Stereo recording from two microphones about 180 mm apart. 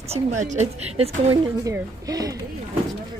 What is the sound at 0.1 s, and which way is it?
Speech, 40° right (ahead or behind).